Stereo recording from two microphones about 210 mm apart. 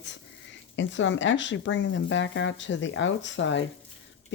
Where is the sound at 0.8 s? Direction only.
60° left (ahead or behind).